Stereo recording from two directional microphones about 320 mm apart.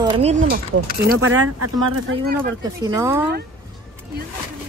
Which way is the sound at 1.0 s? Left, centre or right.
Right.